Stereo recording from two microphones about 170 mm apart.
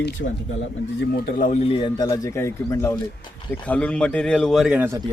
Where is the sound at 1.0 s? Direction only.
60° left (ahead or behind).